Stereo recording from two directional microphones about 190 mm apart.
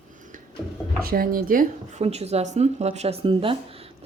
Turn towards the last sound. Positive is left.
turn(degrees=-30)  # may be behind; listen again after turning